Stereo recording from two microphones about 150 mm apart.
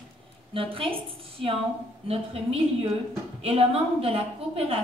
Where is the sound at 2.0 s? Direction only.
40° right (ahead or behind).